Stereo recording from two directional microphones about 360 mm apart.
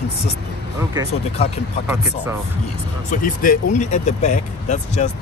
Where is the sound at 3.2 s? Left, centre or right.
Left.